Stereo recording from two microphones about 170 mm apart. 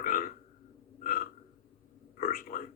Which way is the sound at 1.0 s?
60° left (ahead or behind).